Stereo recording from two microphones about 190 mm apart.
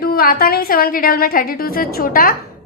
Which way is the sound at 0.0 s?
50° left (ahead or behind).